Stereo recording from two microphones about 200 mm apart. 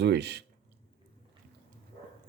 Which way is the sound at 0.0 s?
60° right (ahead or behind).